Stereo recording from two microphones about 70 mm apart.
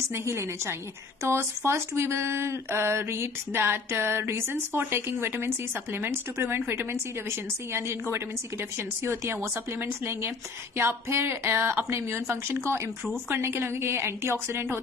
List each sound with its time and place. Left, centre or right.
0.1 s speech: right